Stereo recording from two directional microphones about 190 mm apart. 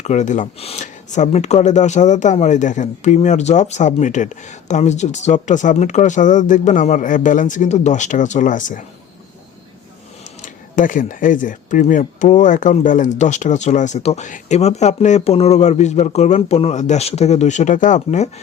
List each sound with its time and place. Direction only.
0.0 s speech: 40° left (ahead or behind)
10.4 s speech: 45° left (ahead or behind)